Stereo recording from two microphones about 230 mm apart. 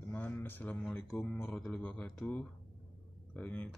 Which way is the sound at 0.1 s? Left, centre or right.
Centre.